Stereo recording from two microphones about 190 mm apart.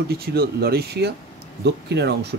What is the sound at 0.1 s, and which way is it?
Speech, 55° right (ahead or behind).